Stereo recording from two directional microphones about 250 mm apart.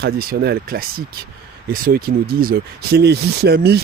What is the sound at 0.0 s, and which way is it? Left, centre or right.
Speech, right.